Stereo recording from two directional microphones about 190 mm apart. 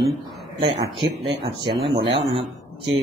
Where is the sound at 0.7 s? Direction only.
30° right (ahead or behind).